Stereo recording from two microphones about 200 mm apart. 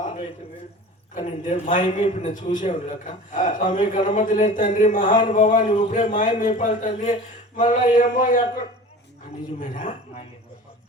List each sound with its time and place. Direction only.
1.1 s a man's voice: 35° left (ahead or behind)